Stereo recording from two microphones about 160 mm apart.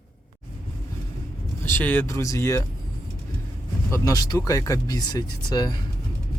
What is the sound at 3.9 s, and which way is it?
Speech, 20° left (ahead or behind).